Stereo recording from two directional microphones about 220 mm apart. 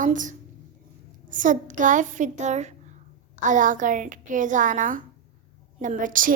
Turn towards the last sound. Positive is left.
turn(degrees=-35)  # may be behind; listen again after turning